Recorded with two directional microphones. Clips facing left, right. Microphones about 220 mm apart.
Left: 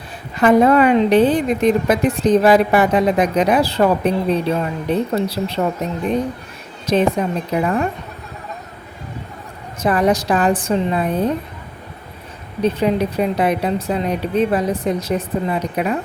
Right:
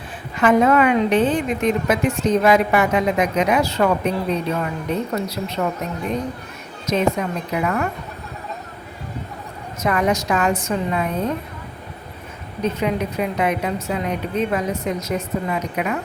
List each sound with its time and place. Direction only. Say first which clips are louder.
0.3 s a woman's voice: left 3 dB; 35° left (ahead or behind)
6.8 s a woman's voice: left 3 dB; 30° left (ahead or behind)
9.8 s a woman's voice: left 4 dB; 35° left (ahead or behind)
12.6 s a woman's voice: left 5 dB; 35° left (ahead or behind)